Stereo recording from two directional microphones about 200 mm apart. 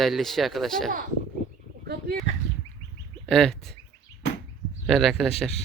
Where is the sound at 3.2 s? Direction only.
Centre (ahead or behind).